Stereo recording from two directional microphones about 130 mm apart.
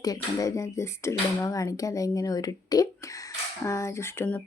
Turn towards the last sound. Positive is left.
turn(degrees=15)  # may be behind; listen again after turning